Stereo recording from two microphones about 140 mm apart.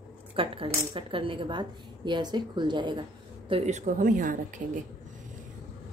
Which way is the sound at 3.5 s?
50° right (ahead or behind).